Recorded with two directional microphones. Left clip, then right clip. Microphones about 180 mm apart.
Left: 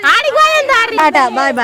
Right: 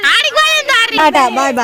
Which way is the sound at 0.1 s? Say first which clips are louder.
Left 3 dB; 55° left (ahead or behind).